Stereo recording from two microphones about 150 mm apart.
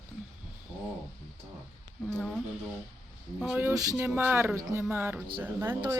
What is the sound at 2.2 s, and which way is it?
Speech, 5° left (ahead or behind).